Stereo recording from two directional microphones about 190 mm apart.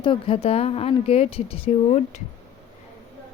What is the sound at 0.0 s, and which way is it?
A woman's voice, 30° left (ahead or behind).